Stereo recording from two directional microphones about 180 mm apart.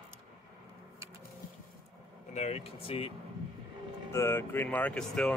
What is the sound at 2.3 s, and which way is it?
Speech, 40° left (ahead or behind).